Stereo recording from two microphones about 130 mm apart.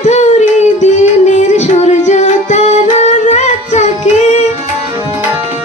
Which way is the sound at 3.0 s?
60° left (ahead or behind).